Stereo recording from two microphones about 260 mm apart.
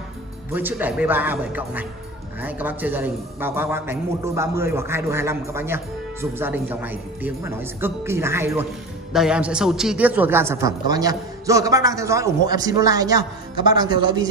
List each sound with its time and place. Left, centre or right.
0.5 s a man's voice: centre